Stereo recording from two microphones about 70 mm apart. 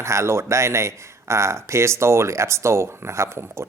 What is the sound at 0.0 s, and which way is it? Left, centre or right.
Speech, right.